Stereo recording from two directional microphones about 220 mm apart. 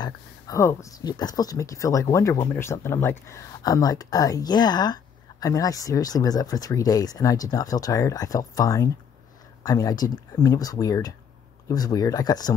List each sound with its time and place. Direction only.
0.0 s speech: 15° left (ahead or behind)